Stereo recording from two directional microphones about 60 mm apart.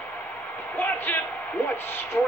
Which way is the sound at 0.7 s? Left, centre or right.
Left.